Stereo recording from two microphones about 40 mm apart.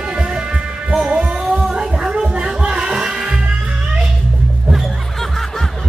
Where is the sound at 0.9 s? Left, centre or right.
Right.